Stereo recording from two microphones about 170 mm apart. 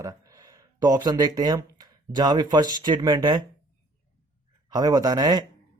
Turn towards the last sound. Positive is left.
turn(degrees=-25)  # may be behind; listen again after turning